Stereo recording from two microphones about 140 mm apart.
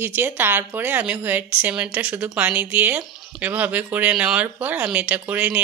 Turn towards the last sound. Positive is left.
turn(degrees=-10)  # may be behind; listen again after turning